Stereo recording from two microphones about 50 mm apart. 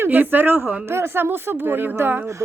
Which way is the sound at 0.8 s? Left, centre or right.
Right.